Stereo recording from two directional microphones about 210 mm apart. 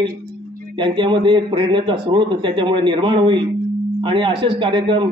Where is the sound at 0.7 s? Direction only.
25° right (ahead or behind).